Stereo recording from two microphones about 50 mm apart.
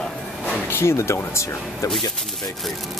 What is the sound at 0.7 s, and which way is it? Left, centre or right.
Speech, left.